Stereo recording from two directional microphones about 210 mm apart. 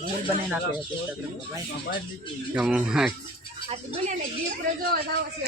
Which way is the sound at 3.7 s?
30° right (ahead or behind).